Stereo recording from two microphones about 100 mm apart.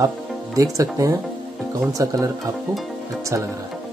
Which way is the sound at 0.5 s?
35° right (ahead or behind).